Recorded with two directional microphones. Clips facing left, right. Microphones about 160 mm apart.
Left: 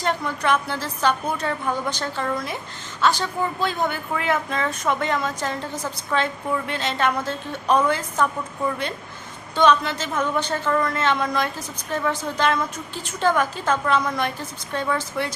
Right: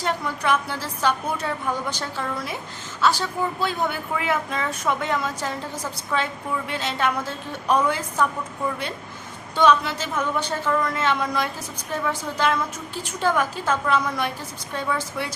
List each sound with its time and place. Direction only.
0.0 s speech: 10° right (ahead or behind)
6.7 s speech: 10° right (ahead or behind)
9.6 s speech: 10° right (ahead or behind)